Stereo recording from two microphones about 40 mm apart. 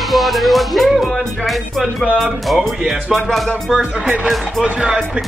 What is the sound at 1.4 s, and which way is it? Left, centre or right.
Speech, centre.